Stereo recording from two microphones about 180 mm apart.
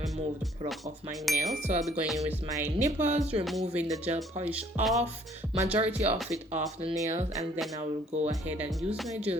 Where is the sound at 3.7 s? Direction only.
10° right (ahead or behind).